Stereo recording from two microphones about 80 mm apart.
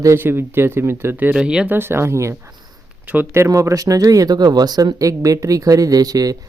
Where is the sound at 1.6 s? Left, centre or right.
Right.